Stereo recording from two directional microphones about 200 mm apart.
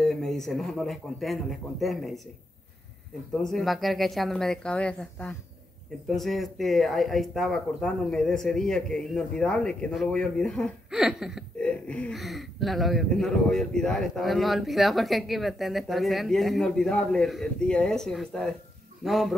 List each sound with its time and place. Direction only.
0.0 s speech: centre (ahead or behind)
3.4 s speech: centre (ahead or behind)